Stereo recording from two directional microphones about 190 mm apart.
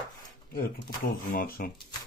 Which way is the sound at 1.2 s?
50° left (ahead or behind).